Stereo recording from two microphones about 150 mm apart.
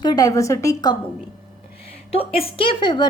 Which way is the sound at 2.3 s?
35° left (ahead or behind).